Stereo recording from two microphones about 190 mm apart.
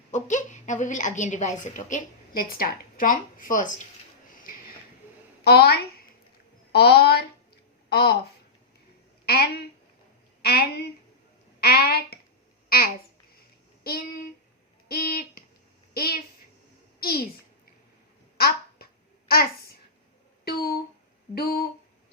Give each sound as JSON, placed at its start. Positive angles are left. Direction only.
{"t": 0.1, "sound": "a woman's voice", "side_deg": 40}
{"t": 5.4, "sound": "a woman's voice", "side_deg": 55}
{"t": 9.2, "sound": "a woman's voice", "side_deg": 55}
{"t": 12.6, "sound": "babbling", "side_deg": 50}
{"t": 14.8, "sound": "a sound", "side_deg": 50}
{"t": 16.0, "sound": "a woman's voice", "side_deg": 55}
{"t": 18.3, "sound": "a sound", "side_deg": 55}
{"t": 19.3, "sound": "a child's voice", "side_deg": 55}